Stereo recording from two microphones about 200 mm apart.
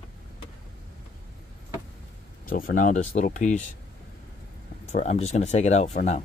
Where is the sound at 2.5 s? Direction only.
45° left (ahead or behind).